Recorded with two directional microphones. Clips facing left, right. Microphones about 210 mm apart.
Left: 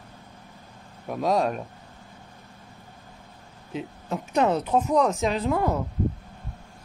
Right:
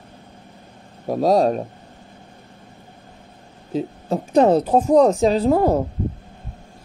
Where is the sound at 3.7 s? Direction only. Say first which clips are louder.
Right 8 dB; 35° right (ahead or behind).